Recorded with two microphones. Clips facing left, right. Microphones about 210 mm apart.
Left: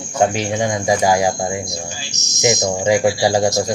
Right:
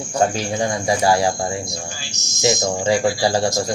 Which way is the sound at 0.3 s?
20° left (ahead or behind).